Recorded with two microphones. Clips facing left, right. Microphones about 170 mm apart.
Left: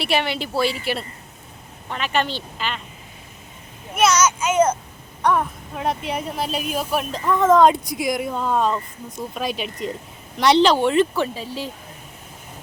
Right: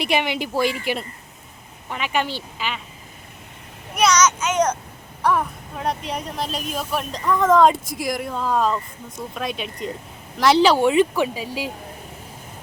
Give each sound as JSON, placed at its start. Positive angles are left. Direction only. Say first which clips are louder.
{"t": 0.0, "sound": "speech", "louder": "even", "side_deg": -15}
{"t": 3.9, "sound": "a sound", "louder": "even", "side_deg": 5}
{"t": 5.2, "sound": "speech", "louder": "left 1 dB", "side_deg": 0}